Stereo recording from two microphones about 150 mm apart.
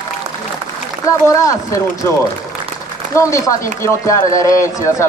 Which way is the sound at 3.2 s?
20° left (ahead or behind).